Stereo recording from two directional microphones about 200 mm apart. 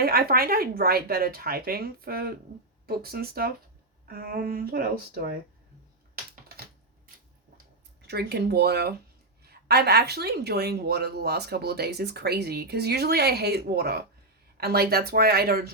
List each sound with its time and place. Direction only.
0.0 s speech: 50° right (ahead or behind)
8.0 s speech: 55° right (ahead or behind)